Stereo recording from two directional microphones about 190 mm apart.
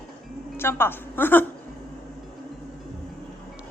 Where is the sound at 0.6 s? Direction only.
10° left (ahead or behind).